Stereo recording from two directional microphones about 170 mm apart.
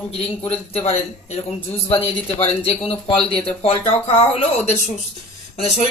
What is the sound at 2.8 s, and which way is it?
Speech, 5° left (ahead or behind).